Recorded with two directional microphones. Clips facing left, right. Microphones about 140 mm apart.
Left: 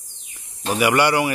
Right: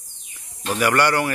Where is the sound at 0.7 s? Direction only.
10° left (ahead or behind).